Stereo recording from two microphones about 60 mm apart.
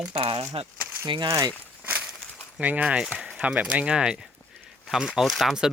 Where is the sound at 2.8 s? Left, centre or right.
Centre.